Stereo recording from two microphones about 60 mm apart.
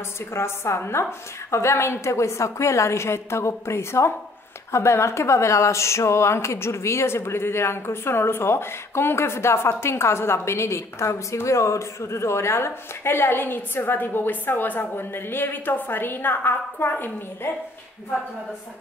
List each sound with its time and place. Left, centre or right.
0.3 s speech: left